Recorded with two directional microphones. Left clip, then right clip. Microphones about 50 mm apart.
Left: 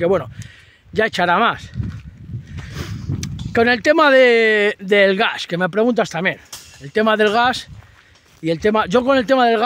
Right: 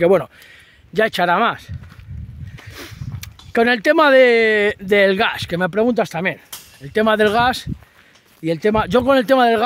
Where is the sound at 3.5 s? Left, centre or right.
Right.